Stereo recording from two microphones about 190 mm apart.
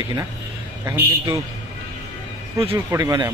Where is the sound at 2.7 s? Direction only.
15° right (ahead or behind).